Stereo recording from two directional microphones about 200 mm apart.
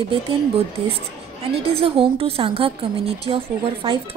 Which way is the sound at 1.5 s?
30° right (ahead or behind).